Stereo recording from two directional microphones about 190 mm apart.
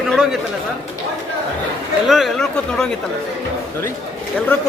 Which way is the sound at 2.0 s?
Centre (ahead or behind).